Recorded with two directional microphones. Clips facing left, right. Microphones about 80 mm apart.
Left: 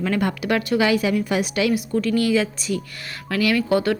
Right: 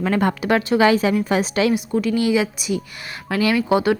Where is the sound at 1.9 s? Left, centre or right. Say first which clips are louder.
Even; centre.